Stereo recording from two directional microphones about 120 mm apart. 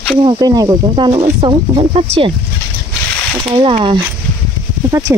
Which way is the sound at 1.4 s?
50° right (ahead or behind).